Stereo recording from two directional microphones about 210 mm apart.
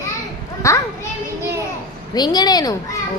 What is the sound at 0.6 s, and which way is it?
Speech, 15° left (ahead or behind).